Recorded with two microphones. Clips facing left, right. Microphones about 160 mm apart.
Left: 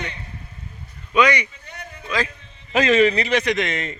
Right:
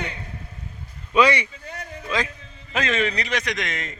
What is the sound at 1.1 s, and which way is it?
Speech, 30° right (ahead or behind).